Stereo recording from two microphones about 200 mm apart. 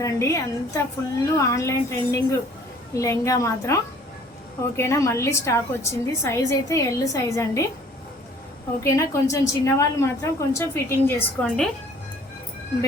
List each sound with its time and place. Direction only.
0.0 s a woman's voice: 15° left (ahead or behind)
4.8 s a woman's voice: 15° left (ahead or behind)
8.8 s a woman's voice: 15° left (ahead or behind)